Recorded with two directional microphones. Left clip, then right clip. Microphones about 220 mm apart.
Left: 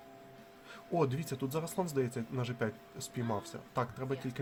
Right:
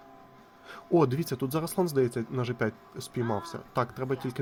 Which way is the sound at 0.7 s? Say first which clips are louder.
Right 8 dB; 25° right (ahead or behind).